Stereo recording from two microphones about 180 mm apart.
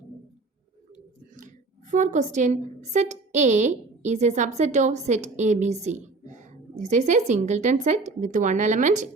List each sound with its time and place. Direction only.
1.4 s a woman's voice: 45° right (ahead or behind)